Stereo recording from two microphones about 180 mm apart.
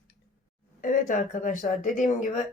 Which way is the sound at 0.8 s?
50° left (ahead or behind).